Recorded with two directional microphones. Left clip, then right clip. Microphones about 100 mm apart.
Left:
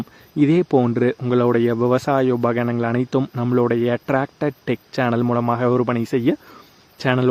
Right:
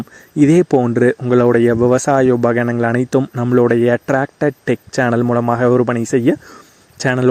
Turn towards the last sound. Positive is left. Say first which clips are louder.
# right 3 dB
turn(degrees=-45)  # may be behind; listen again after turning